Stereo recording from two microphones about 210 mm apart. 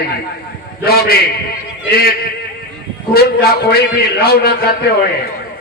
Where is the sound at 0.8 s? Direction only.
45° left (ahead or behind).